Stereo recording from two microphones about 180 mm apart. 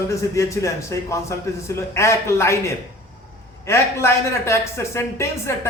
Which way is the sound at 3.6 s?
15° left (ahead or behind).